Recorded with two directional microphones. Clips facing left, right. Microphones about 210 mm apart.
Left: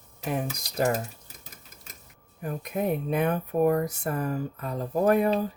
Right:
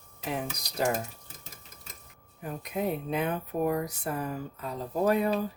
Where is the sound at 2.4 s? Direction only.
50° left (ahead or behind).